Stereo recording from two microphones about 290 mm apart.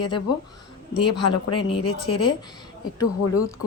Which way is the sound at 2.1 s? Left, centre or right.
Centre.